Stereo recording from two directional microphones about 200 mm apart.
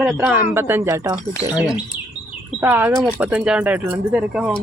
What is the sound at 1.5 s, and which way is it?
Speech, 5° right (ahead or behind).